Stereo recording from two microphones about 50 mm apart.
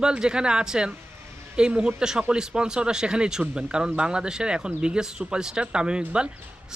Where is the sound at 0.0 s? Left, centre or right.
Centre.